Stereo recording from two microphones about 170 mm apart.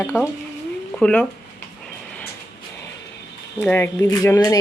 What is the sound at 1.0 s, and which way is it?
Speech, 5° left (ahead or behind).